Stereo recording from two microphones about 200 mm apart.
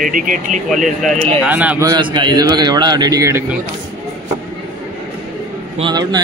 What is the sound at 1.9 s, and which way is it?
A man's voice, 20° right (ahead or behind).